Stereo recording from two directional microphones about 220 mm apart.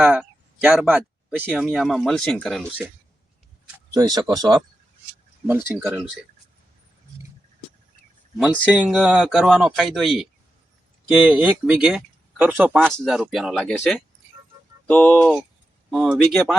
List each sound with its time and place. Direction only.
0.0 s speech: 5° right (ahead or behind)
3.9 s speech: 15° right (ahead or behind)
8.4 s speech: 5° right (ahead or behind)
11.3 s speech: 5° right (ahead or behind)